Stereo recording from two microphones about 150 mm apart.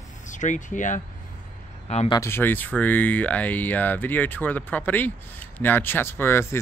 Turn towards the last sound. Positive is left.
turn(degrees=15)  # may be behind; listen again after turning